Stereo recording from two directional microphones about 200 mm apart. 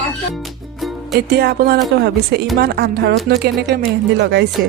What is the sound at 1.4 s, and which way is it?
Speech, 50° right (ahead or behind).